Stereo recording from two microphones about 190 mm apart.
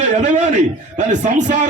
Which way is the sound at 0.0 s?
40° right (ahead or behind).